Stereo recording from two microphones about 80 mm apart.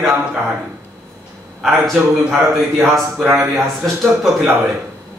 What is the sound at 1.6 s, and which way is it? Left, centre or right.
Speech, centre.